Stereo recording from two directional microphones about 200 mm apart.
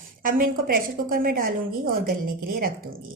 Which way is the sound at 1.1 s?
45° right (ahead or behind).